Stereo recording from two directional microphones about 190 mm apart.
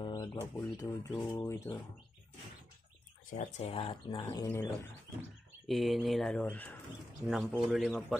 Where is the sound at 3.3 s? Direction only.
40° left (ahead or behind); by 4.7 s 15° left (ahead or behind).